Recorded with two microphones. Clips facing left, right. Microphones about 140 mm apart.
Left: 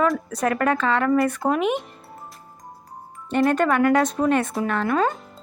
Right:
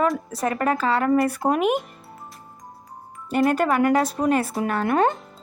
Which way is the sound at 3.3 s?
10° right (ahead or behind).